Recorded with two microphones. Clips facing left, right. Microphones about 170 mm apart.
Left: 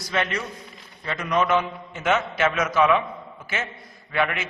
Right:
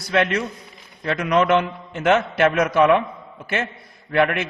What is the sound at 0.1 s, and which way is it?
A man's voice, 65° right (ahead or behind).